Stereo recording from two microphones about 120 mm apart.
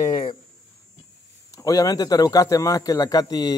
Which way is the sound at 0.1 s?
45° left (ahead or behind).